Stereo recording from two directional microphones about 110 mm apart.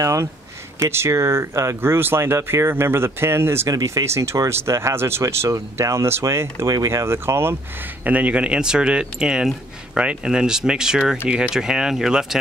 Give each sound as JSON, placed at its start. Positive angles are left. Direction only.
{"t": 0.0, "sound": "speech", "side_deg": -30}
{"t": 3.6, "sound": "speech", "side_deg": -30}